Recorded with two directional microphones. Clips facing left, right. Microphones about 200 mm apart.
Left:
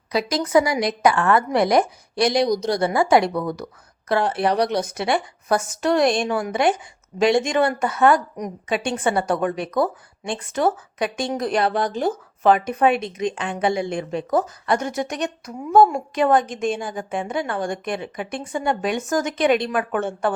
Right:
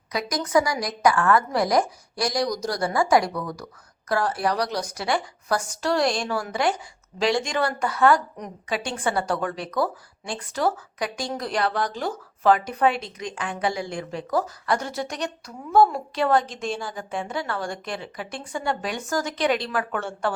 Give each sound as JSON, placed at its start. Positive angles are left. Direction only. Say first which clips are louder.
{"t": 0.1, "sound": "a woman's voice", "louder": "left 4 dB", "side_deg": 25}